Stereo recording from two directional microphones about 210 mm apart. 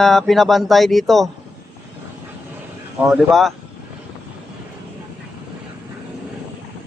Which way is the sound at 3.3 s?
Centre (ahead or behind).